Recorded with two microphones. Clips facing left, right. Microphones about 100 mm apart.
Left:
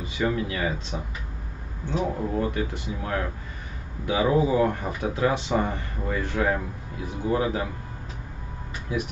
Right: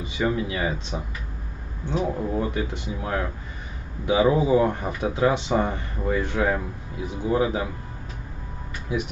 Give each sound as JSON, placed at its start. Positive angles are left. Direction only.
{"t": 0.0, "sound": "speech", "side_deg": -20}